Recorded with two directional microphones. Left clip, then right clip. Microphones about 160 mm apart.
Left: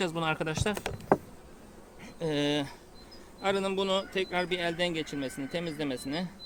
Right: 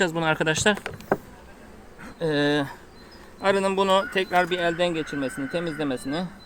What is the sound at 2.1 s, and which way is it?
Speech, 10° right (ahead or behind).